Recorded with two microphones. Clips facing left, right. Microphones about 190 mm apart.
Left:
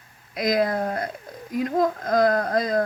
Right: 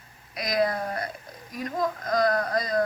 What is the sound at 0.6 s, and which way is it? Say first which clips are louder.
Speech: left 4 dB; 50° left (ahead or behind).